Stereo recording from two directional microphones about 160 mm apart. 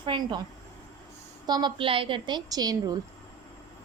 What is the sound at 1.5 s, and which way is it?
A woman's voice, 25° right (ahead or behind).